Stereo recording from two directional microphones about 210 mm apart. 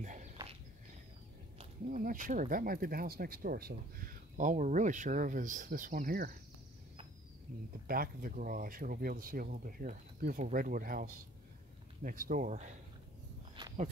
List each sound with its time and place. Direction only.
0.0 s dog: 35° right (ahead or behind)
1.9 s speech: 40° right (ahead or behind)
7.8 s speech: 45° right (ahead or behind)
13.6 s walk: 20° right (ahead or behind)